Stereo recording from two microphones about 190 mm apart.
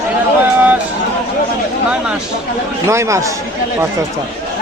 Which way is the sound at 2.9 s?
15° right (ahead or behind).